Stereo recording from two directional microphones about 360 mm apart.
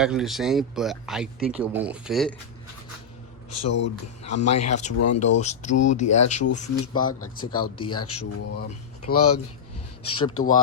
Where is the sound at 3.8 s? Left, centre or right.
Left.